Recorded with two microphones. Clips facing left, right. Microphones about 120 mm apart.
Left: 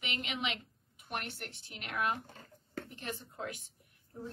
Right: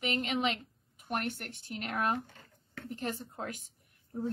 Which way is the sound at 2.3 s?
35° left (ahead or behind).